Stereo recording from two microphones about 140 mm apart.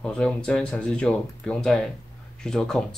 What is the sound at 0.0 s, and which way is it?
Speech, 5° left (ahead or behind).